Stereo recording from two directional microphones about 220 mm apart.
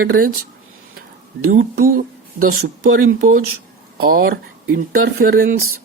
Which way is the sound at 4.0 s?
45° right (ahead or behind).